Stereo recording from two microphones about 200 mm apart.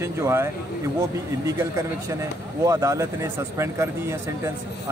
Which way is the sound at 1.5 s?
15° right (ahead or behind).